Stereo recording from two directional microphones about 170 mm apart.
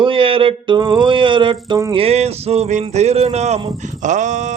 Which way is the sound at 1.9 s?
35° right (ahead or behind).